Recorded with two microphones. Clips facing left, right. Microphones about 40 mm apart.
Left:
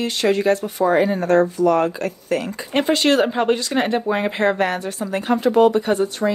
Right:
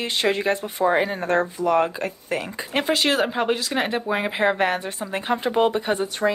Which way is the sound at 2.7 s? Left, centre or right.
Centre.